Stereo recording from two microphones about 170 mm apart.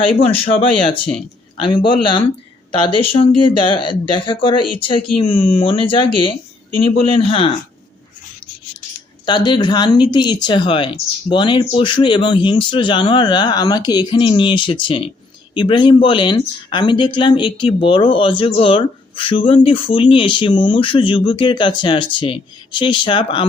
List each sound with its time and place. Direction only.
0.5 s speech: 30° left (ahead or behind)
9.2 s speech: 25° left (ahead or behind)